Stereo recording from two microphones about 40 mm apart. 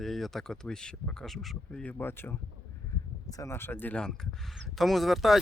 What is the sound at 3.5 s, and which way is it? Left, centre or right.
Speech, left.